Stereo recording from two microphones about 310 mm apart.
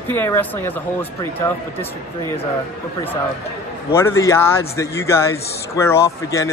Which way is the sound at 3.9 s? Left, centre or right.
Centre.